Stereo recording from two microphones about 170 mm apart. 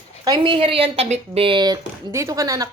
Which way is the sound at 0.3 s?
30° right (ahead or behind).